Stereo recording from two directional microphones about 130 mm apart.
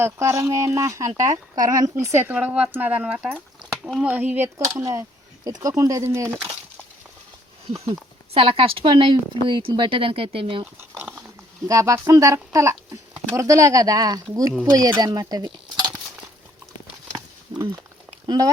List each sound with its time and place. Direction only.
0.0 s speech: 20° right (ahead or behind)
8.3 s speech: 45° right (ahead or behind)
11.7 s speech: 25° right (ahead or behind)
17.5 s a sound: 35° right (ahead or behind)
18.3 s speech: 30° right (ahead or behind)